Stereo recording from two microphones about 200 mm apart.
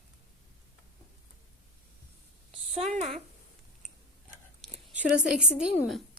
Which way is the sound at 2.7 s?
30° right (ahead or behind).